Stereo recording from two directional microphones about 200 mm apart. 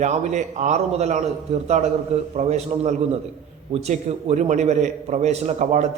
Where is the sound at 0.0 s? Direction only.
35° right (ahead or behind).